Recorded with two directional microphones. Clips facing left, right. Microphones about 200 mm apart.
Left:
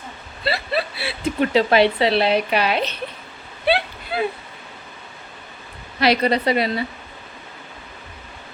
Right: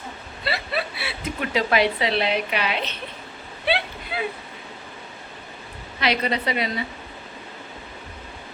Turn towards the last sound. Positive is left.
turn(degrees=35)  # may be behind; listen again after turning